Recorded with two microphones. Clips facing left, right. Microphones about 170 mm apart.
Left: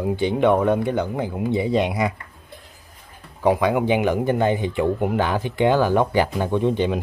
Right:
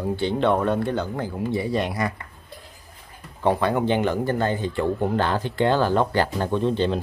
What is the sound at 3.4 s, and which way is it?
Speech, 10° left (ahead or behind).